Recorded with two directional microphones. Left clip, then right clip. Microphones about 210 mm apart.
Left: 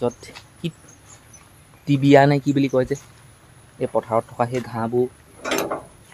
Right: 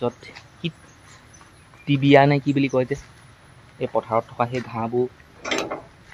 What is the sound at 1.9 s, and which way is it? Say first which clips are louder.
Speech: left 1 dB; 15° left (ahead or behind).